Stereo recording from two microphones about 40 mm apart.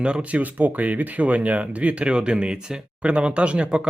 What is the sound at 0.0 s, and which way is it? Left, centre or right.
Speech, right.